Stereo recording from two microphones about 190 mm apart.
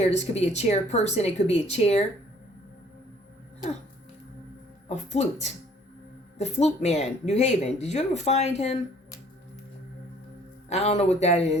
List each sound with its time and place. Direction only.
0.0 s speech: 35° left (ahead or behind)
4.9 s speech: 35° left (ahead or behind)
10.7 s speech: 35° left (ahead or behind)